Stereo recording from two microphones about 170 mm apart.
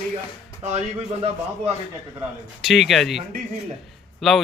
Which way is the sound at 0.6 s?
40° right (ahead or behind).